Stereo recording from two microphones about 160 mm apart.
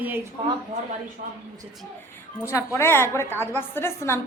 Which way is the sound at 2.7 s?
15° left (ahead or behind).